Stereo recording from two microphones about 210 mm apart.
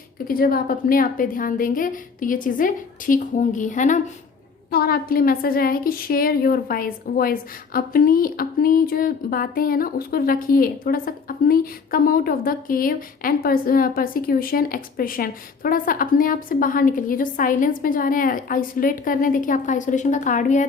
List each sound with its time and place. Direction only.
0.3 s a woman's voice: 45° left (ahead or behind)